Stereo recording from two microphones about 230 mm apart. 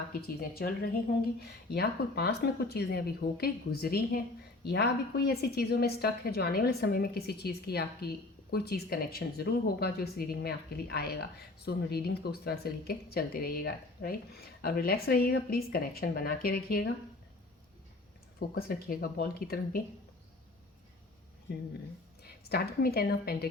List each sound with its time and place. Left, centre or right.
0.1 s a woman's voice: left
18.3 s speech: left
22.2 s a woman's voice: left